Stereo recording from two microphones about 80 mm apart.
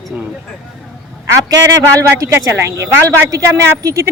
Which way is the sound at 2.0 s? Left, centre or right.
Right.